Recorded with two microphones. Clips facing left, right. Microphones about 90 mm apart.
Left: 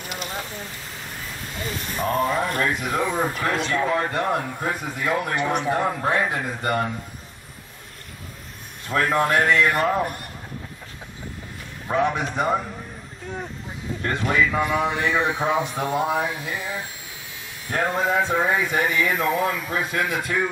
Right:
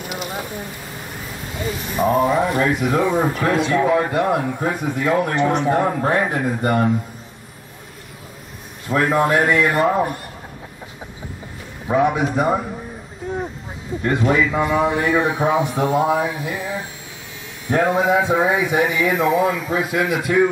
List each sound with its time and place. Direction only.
0.0 s a sound: 5° right (ahead or behind)
2.0 s a man's voice: 10° right (ahead or behind)
5.6 s a man's voice: 15° right (ahead or behind)
8.8 s a man's voice: 15° right (ahead or behind)
11.9 s a man's voice: 10° right (ahead or behind)
13.2 s a sound: 15° right (ahead or behind)
14.0 s a man's voice: 10° right (ahead or behind)